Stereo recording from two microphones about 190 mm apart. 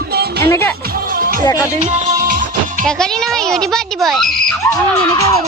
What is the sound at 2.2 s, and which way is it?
Music, 45° right (ahead or behind).